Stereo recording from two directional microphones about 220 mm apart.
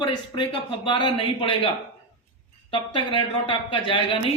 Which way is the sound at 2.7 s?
20° left (ahead or behind).